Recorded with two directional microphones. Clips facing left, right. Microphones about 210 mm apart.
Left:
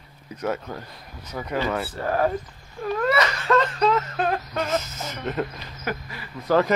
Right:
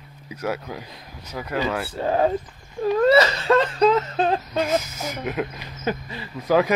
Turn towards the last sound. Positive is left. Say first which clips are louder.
# right 1 dB
turn(degrees=-10)  # may be behind; listen again after turning